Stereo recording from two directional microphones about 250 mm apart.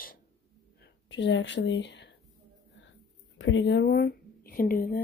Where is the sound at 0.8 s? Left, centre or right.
Left.